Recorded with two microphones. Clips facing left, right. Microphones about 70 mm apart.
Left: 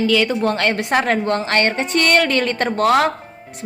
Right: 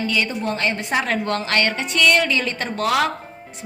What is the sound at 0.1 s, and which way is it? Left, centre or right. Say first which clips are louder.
Speech: left 6 dB; left.